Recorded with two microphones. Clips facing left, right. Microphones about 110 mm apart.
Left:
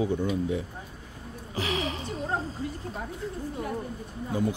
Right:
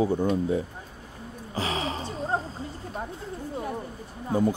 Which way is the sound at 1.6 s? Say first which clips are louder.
Right 1 dB; 35° right (ahead or behind).